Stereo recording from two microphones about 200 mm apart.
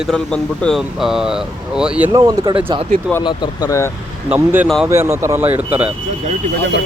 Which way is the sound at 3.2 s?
20° left (ahead or behind).